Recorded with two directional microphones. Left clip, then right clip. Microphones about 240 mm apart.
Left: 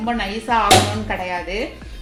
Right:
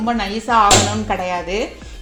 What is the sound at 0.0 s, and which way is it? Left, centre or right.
Speech, right.